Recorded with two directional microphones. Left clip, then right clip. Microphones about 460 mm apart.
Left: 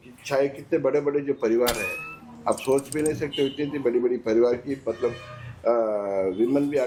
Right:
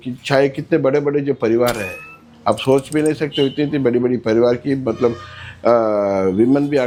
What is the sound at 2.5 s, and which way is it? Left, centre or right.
Speech, right.